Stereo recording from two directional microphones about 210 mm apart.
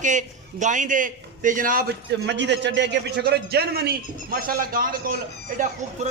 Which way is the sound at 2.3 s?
55° right (ahead or behind).